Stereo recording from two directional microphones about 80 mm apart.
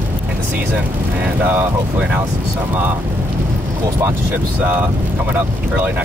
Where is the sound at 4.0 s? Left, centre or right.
Right.